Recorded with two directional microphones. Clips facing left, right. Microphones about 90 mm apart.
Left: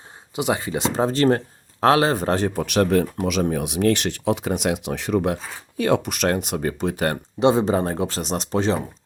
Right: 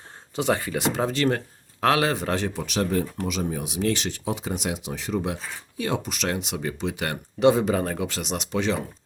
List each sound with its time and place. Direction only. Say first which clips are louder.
0.3 s speech: left 1 dB; 15° left (ahead or behind); by 7.2 s 40° left (ahead or behind)
7.3 s speech: left 1 dB; 25° left (ahead or behind)